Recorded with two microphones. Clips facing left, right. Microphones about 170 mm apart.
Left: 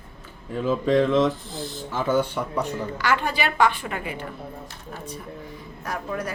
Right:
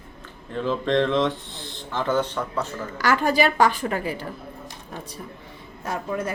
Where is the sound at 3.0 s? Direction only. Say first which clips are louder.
Right 5 dB; 40° right (ahead or behind).